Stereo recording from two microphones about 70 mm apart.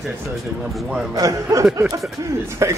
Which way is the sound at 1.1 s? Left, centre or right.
Right.